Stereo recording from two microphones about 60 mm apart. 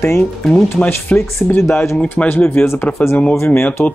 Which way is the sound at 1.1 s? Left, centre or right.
Left.